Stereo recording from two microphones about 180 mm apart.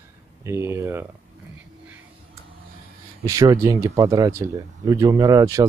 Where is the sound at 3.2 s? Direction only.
15° right (ahead or behind).